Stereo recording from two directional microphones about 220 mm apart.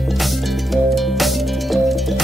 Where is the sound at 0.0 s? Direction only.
Centre (ahead or behind).